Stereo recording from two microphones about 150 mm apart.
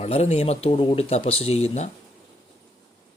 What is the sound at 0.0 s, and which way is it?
Speech, 45° left (ahead or behind).